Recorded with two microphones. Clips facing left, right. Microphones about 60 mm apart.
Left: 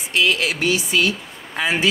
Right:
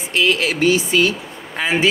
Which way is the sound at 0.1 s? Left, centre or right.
Right.